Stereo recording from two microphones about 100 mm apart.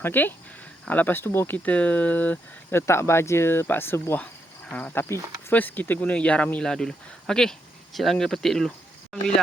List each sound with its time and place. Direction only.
0.0 s speech: 20° left (ahead or behind)
1.5 s speech: 15° left (ahead or behind)
4.2 s cricket: 15° left (ahead or behind)
5.5 s speech: 15° left (ahead or behind)